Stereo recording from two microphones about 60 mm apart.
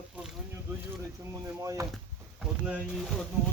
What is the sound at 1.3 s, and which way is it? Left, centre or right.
Speech, right.